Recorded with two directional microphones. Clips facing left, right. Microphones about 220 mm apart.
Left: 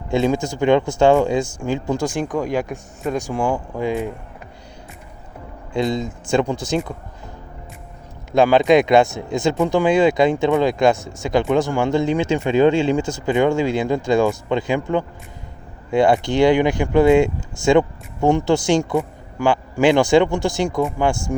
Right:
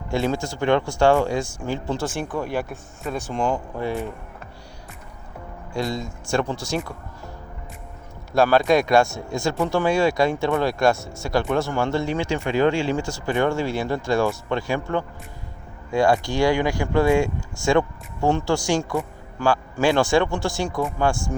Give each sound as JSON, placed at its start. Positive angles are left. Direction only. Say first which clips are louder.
{"t": 0.1, "sound": "speech", "louder": "left 5 dB", "side_deg": 20}
{"t": 5.7, "sound": "speech", "louder": "left 6 dB", "side_deg": 20}
{"t": 8.3, "sound": "speech", "louder": "left 4 dB", "side_deg": 20}